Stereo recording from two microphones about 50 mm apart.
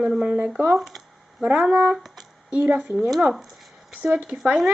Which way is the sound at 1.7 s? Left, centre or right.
Right.